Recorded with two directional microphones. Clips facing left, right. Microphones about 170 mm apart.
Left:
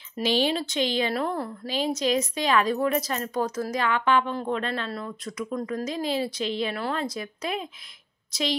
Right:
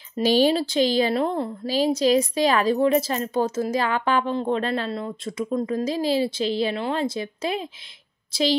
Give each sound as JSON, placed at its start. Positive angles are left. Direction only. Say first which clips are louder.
{"t": 0.2, "sound": "a woman's voice", "louder": "right 6 dB", "side_deg": -40}
{"t": 1.7, "sound": "a woman's voice", "louder": "right 6 dB", "side_deg": -35}